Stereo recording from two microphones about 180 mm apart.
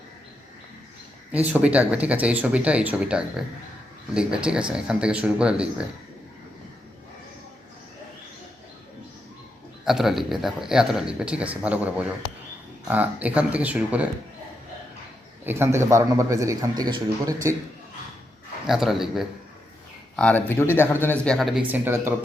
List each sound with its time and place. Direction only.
1.3 s a man's voice: 5° right (ahead or behind)
9.8 s a man's voice: centre (ahead or behind)
15.4 s a man's voice: 15° right (ahead or behind)
18.7 s speech: centre (ahead or behind)
21.7 s a man's voice: 10° right (ahead or behind)